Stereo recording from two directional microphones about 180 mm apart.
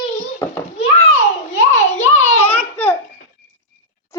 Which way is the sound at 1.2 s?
40° left (ahead or behind).